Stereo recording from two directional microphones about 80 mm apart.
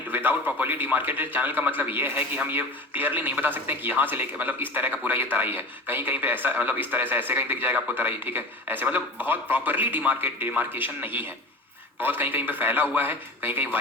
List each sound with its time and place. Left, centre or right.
0.1 s a man's voice: right